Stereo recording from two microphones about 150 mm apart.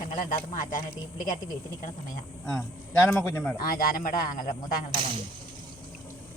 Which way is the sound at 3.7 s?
65° left (ahead or behind).